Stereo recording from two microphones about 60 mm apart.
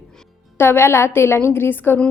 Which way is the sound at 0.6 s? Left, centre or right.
Left.